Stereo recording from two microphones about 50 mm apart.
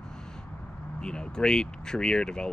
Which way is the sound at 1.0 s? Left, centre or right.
Centre.